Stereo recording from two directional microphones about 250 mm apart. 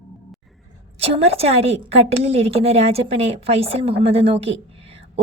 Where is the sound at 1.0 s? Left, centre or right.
Right.